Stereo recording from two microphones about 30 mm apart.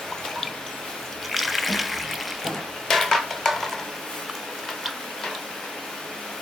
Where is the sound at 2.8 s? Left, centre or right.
Centre.